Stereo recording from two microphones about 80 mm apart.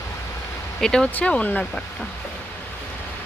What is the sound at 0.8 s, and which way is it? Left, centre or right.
Speech, centre.